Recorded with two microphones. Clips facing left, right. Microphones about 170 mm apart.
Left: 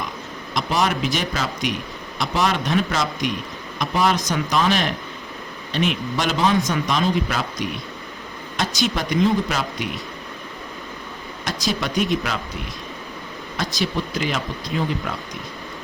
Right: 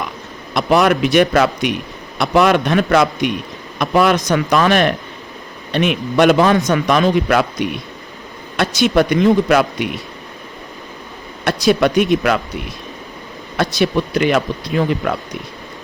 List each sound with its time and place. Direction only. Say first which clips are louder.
0.5 s speech: right 8 dB; 65° right (ahead or behind)
11.4 s speech: right 11 dB; 65° right (ahead or behind)
13.6 s speech: right 8 dB; 65° right (ahead or behind)